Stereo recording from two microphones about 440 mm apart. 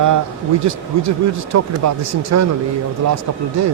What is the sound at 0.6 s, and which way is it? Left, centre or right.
Speech, right.